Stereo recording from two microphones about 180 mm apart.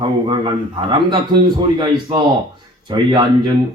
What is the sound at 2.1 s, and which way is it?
Speech, 35° right (ahead or behind).